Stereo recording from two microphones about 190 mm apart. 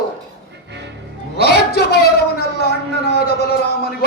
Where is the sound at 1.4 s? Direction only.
60° left (ahead or behind).